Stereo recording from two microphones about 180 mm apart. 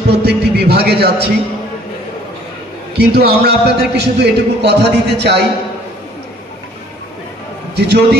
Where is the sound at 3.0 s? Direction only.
60° right (ahead or behind).